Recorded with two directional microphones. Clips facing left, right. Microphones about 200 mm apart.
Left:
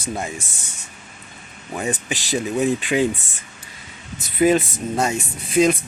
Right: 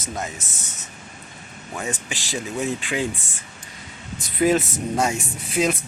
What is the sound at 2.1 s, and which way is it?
Speech, 15° left (ahead or behind).